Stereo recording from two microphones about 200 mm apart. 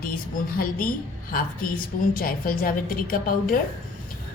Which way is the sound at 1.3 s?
45° left (ahead or behind).